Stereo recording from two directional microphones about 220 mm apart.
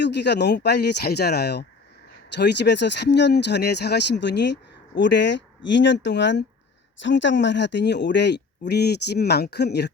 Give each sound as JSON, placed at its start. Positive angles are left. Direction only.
{"t": 0.0, "sound": "speech", "side_deg": 50}